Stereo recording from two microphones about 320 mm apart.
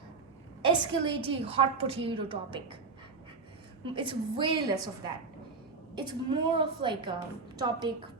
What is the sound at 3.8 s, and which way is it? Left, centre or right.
A woman's voice, centre.